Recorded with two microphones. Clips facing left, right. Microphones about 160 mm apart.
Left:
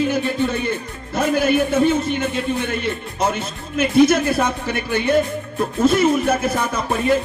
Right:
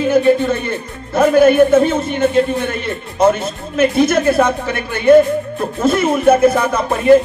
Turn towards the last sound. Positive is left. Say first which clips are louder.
# right 7 dB
turn(degrees=-55)  # may be behind; listen again after turning